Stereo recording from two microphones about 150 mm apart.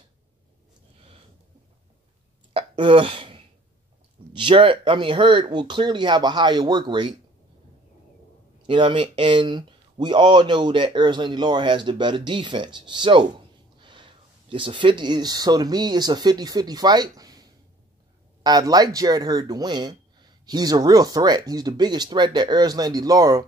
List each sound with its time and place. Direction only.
2.5 s speech: 35° right (ahead or behind)
8.6 s speech: 30° right (ahead or behind)